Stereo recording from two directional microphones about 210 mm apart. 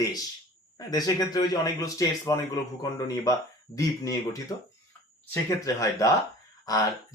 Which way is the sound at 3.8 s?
15° left (ahead or behind).